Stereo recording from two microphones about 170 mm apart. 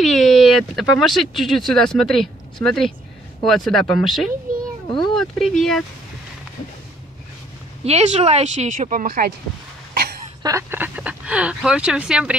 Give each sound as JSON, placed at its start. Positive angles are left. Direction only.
{"t": 0.0, "sound": "speech", "side_deg": 0}
{"t": 7.8, "sound": "speech", "side_deg": -40}
{"t": 10.4, "sound": "speech", "side_deg": -15}